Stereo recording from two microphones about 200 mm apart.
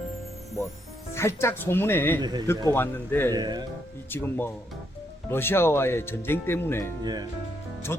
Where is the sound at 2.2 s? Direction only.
20° right (ahead or behind).